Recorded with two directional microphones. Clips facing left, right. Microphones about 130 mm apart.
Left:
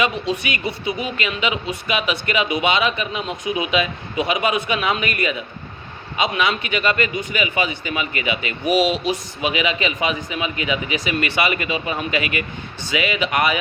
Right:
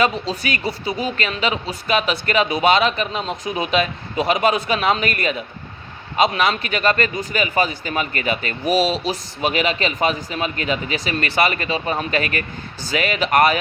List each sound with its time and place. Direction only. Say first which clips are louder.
0.0 s speech: right 1 dB; 40° right (ahead or behind)
11.3 s speech: right 2 dB; 35° right (ahead or behind)